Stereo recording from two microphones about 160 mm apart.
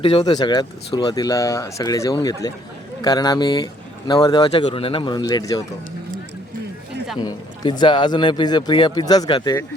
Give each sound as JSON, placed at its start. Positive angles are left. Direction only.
{"t": 0.0, "sound": "speech", "side_deg": 35}
{"t": 7.2, "sound": "speech", "side_deg": 25}